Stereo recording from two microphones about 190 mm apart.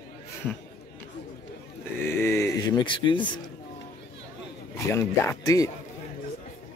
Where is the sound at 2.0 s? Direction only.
15° left (ahead or behind).